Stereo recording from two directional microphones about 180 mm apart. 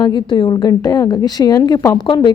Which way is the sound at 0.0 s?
25° left (ahead or behind).